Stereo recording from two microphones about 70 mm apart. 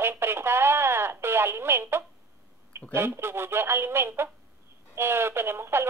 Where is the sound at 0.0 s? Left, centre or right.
Right.